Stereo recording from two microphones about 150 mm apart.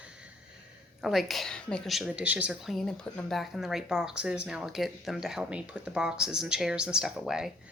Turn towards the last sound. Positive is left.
turn(degrees=-5)  # may be behind; listen again after turning